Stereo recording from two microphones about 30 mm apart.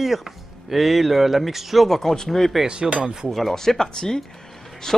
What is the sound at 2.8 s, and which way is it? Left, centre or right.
Speech, centre.